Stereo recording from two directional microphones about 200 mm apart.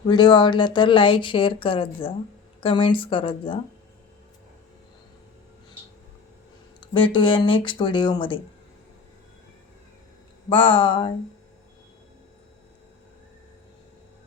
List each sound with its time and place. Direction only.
0.1 s speech: 20° left (ahead or behind)
6.7 s speech: 25° left (ahead or behind)
10.5 s speech: 25° left (ahead or behind)